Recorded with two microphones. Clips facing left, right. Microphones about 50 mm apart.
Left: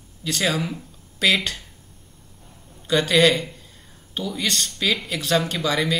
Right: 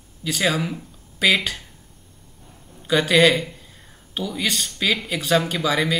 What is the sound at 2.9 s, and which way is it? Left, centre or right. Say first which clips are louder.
Speech: right 1 dB; centre.